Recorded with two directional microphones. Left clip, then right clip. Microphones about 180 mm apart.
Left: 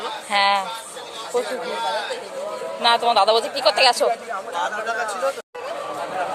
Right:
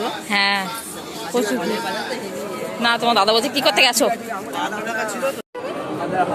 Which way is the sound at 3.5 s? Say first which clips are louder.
Right 2 dB; centre (ahead or behind).